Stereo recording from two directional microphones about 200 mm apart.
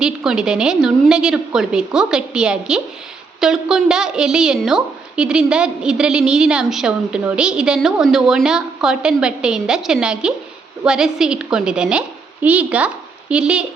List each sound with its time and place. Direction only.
0.0 s a woman's voice: 5° right (ahead or behind)